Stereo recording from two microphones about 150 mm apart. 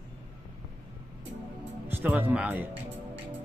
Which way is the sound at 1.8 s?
15° right (ahead or behind).